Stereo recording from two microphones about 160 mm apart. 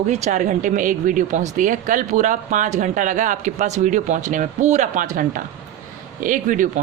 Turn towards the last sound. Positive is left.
turn(degrees=-55)  # may be behind; listen again after turning